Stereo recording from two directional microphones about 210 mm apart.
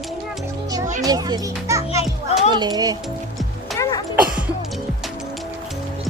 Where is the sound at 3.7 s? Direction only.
Centre (ahead or behind).